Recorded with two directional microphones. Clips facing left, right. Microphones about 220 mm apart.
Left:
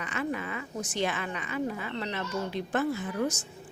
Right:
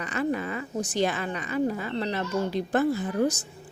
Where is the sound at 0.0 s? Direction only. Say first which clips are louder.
Right 5 dB; 40° right (ahead or behind).